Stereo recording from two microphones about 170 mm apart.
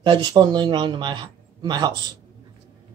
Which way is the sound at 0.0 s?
30° right (ahead or behind).